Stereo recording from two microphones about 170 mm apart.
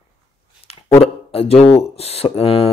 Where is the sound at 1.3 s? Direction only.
35° left (ahead or behind).